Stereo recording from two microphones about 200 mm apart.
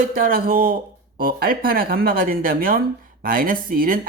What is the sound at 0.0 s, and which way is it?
Speech, 45° right (ahead or behind).